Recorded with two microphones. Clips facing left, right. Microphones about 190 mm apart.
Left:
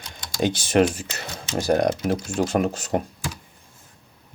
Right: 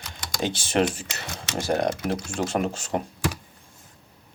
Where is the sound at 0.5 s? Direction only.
40° left (ahead or behind).